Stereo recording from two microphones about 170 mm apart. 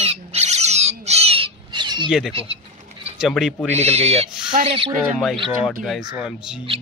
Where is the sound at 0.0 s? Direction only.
35° right (ahead or behind).